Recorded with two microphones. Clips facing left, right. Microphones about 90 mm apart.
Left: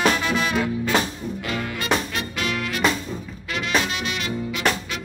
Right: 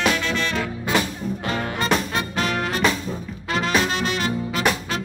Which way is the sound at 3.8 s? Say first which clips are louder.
Right 4 dB; 40° right (ahead or behind).